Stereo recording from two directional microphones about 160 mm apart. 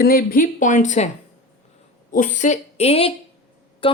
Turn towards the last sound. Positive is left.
turn(degrees=35)  # may be behind; listen again after turning